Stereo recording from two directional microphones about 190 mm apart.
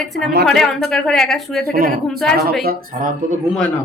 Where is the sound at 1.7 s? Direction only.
50° right (ahead or behind).